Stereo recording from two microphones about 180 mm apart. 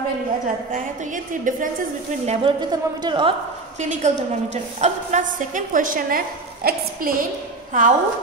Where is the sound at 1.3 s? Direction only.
45° right (ahead or behind).